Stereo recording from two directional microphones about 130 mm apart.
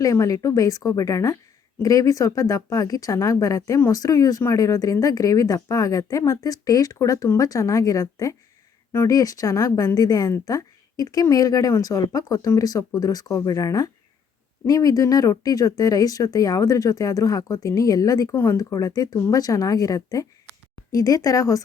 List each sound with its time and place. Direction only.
0.0 s a woman's voice: 25° left (ahead or behind)